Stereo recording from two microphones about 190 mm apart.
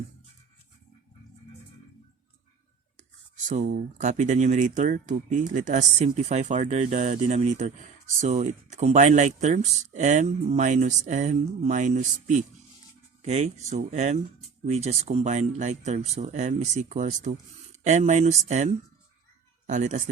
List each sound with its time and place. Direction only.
3.5 s speech: 40° right (ahead or behind)